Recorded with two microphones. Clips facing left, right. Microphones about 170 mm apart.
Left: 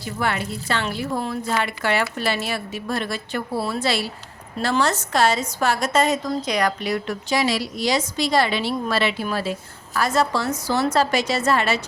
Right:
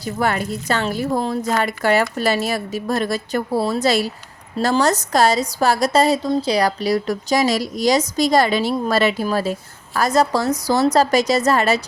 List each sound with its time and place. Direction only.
0.0 s a woman's voice: 40° right (ahead or behind)